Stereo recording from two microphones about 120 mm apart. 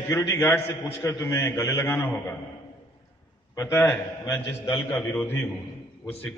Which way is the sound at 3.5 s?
25° left (ahead or behind).